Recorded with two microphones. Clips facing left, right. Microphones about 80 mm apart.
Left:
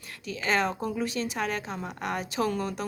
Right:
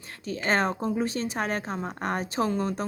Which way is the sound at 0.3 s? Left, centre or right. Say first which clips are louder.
Right 2 dB; right.